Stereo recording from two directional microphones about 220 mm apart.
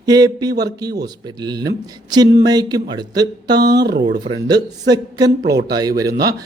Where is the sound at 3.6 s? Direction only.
50° right (ahead or behind).